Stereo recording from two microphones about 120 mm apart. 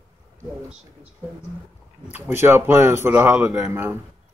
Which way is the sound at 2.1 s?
15° right (ahead or behind).